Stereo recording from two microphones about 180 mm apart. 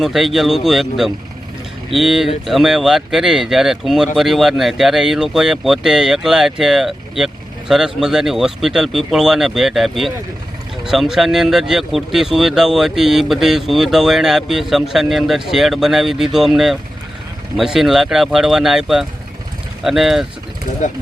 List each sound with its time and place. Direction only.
0.0 s speech: centre (ahead or behind)